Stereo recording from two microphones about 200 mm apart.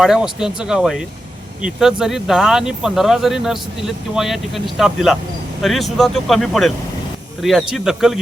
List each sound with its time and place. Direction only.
0.0 s speech: 5° right (ahead or behind)